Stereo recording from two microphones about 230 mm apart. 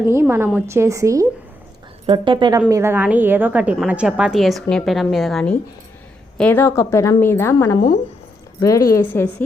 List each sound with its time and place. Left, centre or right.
0.1 s a woman's voice: centre